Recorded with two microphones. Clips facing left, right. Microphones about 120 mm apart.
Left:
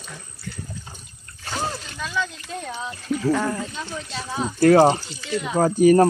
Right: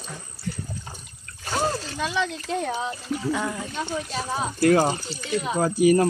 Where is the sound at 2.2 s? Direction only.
65° right (ahead or behind).